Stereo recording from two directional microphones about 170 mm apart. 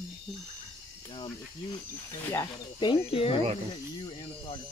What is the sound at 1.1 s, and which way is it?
Speech, 30° left (ahead or behind).